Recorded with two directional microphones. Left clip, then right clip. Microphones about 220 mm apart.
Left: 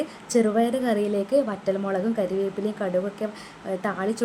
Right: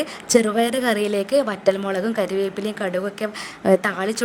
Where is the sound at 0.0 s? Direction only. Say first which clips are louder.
Right 5 dB; 45° right (ahead or behind).